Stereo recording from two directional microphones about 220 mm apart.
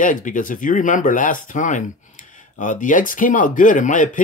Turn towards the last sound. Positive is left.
turn(degrees=35)  # may be behind; listen again after turning